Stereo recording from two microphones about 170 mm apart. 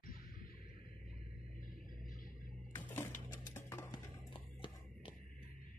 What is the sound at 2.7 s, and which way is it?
Music, 15° left (ahead or behind).